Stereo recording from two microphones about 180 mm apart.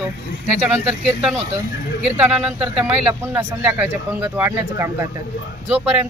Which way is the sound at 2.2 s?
5° right (ahead or behind).